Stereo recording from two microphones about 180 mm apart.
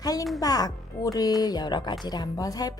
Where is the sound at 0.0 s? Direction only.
20° left (ahead or behind).